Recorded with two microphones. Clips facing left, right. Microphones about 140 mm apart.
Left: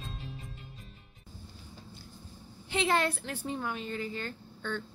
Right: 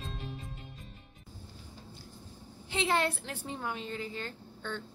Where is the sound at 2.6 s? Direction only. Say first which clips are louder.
Left 1 dB; 20° right (ahead or behind).